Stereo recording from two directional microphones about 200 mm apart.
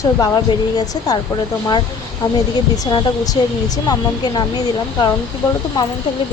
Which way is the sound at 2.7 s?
20° left (ahead or behind).